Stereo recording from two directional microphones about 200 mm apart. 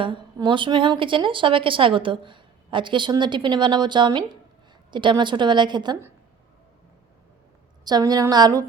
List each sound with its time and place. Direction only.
0.0 s a woman's voice: 25° right (ahead or behind)
7.9 s a woman's voice: 20° right (ahead or behind)